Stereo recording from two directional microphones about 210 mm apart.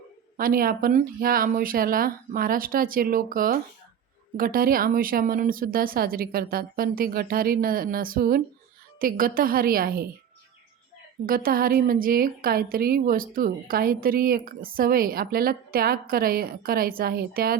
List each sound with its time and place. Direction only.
0.3 s a woman's voice: 45° right (ahead or behind)
11.3 s a woman's voice: 45° right (ahead or behind)